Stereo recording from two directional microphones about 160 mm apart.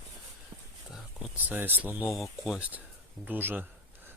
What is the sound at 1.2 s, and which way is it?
Speech, 10° right (ahead or behind).